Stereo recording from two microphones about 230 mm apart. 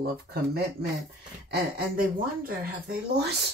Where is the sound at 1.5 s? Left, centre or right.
Right.